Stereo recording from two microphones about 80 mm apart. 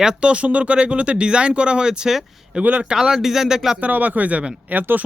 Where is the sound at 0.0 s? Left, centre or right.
Centre.